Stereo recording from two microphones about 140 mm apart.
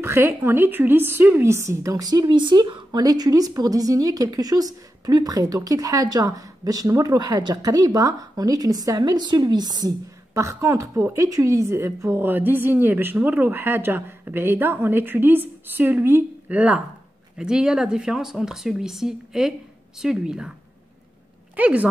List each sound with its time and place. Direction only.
0.0 s a woman's voice: 15° right (ahead or behind)
21.5 s speech: 10° right (ahead or behind)